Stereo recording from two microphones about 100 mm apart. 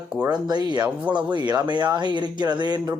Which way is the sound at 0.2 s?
45° right (ahead or behind).